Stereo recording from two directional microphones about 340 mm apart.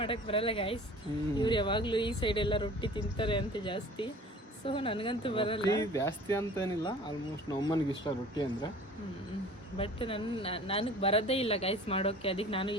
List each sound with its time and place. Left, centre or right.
0.0 s speech: centre
8.0 s speech: centre
9.7 s speech: centre